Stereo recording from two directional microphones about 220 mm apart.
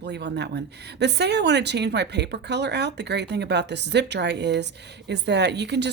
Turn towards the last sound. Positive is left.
turn(degrees=-50)  # may be behind; listen again after turning